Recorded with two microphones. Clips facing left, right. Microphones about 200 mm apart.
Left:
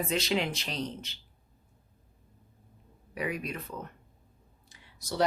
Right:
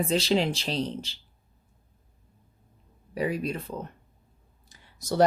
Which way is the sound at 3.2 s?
30° right (ahead or behind).